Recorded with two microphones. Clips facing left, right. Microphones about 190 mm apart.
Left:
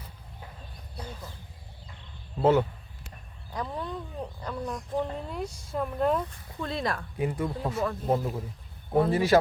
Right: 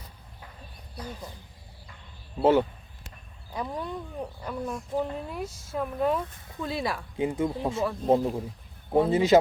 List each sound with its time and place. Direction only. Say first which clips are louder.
3.5 s speech: right 1 dB; 10° right (ahead or behind)
7.2 s speech: right 4 dB; 20° right (ahead or behind)